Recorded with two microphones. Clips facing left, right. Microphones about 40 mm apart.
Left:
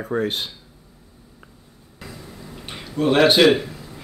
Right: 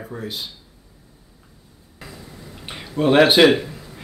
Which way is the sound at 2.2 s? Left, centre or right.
Centre.